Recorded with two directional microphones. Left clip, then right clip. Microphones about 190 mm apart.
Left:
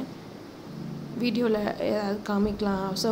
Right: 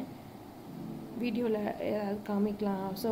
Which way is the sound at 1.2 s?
25° left (ahead or behind).